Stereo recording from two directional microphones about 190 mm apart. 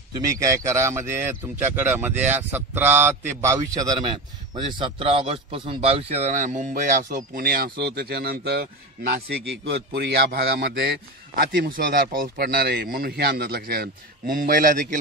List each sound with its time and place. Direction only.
0.1 s a man's voice: 15° right (ahead or behind); by 8.6 s 55° right (ahead or behind)
9.7 s a man's voice: 60° right (ahead or behind); by 15.0 s 45° right (ahead or behind)